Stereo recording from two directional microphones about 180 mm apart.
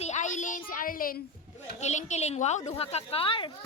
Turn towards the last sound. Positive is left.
turn(degrees=30)  # may be behind; listen again after turning